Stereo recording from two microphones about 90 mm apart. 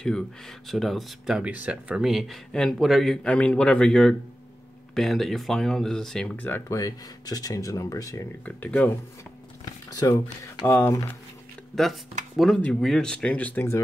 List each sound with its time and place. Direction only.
0.0 s speech: 5° left (ahead or behind)
1.5 s speech: 15° right (ahead or behind); by 6.3 s 5° left (ahead or behind)
6.3 s speech: 20° left (ahead or behind)
6.7 s speech: 40° left (ahead or behind)
8.5 s speech: 15° left (ahead or behind)
9.8 s speech: 40° left (ahead or behind)
11.7 s speech: centre (ahead or behind); by 13.7 s 15° left (ahead or behind)